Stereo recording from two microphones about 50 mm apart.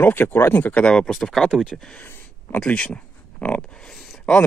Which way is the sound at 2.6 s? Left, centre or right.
Left.